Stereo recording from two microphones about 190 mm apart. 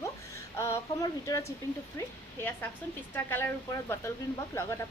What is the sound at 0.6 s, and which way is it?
A woman's voice, 15° left (ahead or behind).